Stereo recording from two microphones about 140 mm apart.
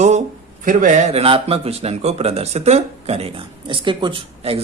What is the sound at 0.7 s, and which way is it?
Speech, 70° right (ahead or behind).